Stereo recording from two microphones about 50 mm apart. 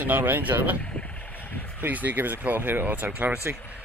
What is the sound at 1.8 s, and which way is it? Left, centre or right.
Speech, right.